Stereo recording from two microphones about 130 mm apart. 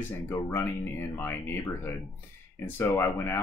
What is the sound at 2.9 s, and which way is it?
Speech, 20° left (ahead or behind).